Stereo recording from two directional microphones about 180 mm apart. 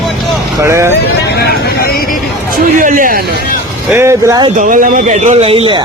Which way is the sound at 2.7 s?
45° right (ahead or behind).